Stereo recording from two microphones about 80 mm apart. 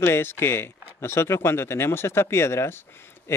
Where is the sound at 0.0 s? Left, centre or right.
Left.